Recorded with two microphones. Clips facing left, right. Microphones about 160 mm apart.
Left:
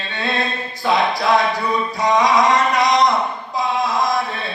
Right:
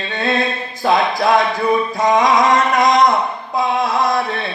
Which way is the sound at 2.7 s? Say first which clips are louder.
Right 3 dB; 50° right (ahead or behind).